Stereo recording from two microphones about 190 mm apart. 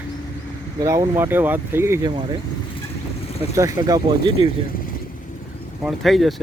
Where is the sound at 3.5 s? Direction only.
15° right (ahead or behind).